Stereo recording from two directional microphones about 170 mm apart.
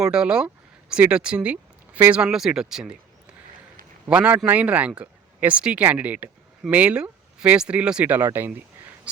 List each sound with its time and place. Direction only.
0.0 s speech: 5° right (ahead or behind)
4.1 s speech: 10° right (ahead or behind)